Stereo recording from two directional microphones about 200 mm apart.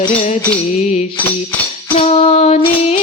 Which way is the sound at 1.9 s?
30° left (ahead or behind).